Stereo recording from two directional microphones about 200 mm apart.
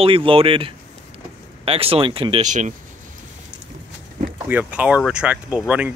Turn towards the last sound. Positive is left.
turn(degrees=-5)  # may be behind; listen again after turning